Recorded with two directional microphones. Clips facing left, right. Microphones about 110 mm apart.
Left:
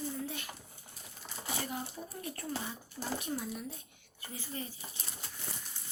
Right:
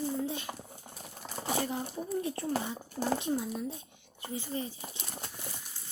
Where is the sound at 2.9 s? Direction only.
55° right (ahead or behind).